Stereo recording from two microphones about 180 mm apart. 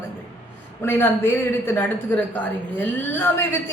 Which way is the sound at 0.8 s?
10° left (ahead or behind).